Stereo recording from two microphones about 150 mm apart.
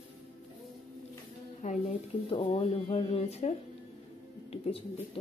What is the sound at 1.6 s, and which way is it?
Speech, 55° left (ahead or behind).